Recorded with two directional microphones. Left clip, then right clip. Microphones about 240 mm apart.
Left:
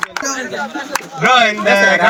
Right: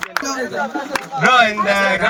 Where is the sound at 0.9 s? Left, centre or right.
Left.